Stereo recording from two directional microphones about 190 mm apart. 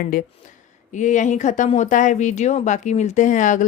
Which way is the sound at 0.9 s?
40° left (ahead or behind).